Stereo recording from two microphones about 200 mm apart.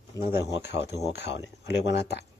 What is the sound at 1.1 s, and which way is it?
Speech, 60° left (ahead or behind).